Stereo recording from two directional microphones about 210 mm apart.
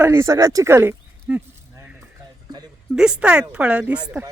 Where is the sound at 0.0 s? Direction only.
10° right (ahead or behind).